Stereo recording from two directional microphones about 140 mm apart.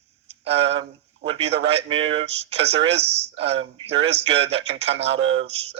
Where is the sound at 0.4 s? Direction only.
45° right (ahead or behind).